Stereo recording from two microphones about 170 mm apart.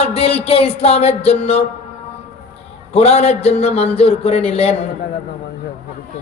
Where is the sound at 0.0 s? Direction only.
35° left (ahead or behind).